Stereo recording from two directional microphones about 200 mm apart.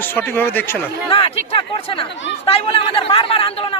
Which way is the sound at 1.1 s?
25° left (ahead or behind).